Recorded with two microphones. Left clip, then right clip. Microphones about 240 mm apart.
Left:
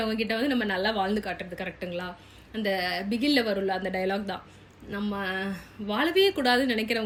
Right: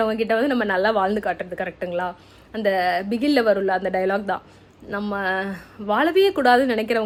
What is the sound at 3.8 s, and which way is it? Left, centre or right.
Speech, right.